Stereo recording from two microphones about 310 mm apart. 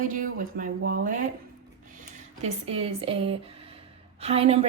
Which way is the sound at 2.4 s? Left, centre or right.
Right.